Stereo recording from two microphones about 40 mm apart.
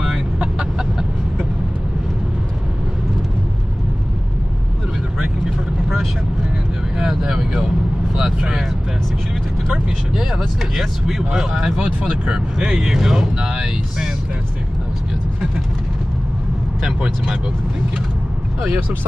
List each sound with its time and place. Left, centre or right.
0.4 s chicken: centre
7.1 s vehicle: centre
9.7 s speech: centre
16.8 s speech: right